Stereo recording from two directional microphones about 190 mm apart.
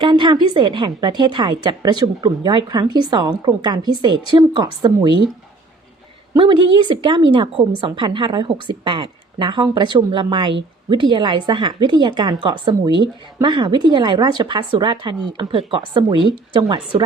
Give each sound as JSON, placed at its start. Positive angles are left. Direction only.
{"t": 0.0, "sound": "a woman's voice", "side_deg": -25}
{"t": 6.3, "sound": "a woman's voice", "side_deg": -25}